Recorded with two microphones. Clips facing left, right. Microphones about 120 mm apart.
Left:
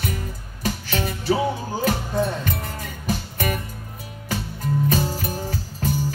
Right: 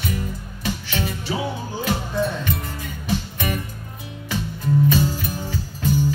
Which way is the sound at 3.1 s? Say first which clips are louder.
Even; 45° left (ahead or behind).